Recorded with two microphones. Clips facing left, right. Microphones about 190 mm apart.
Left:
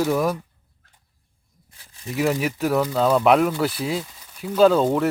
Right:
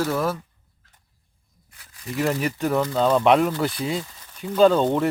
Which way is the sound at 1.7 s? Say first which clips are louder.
Even; 25° left (ahead or behind).